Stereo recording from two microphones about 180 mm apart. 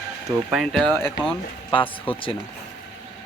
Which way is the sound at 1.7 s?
30° left (ahead or behind).